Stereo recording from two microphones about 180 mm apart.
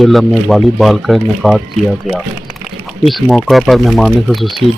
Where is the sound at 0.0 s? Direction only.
Centre (ahead or behind).